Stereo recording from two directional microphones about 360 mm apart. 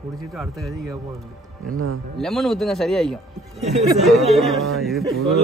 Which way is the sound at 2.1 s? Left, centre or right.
Centre.